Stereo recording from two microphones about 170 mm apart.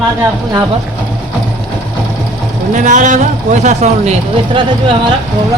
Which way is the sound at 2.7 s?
45° right (ahead or behind).